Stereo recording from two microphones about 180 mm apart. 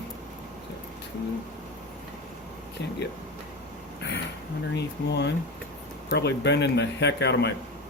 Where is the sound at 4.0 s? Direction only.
70° left (ahead or behind).